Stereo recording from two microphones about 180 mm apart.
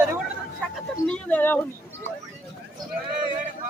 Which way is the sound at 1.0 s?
5° left (ahead or behind).